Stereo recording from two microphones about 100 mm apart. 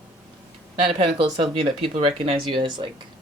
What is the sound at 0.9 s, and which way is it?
Speech, 80° right.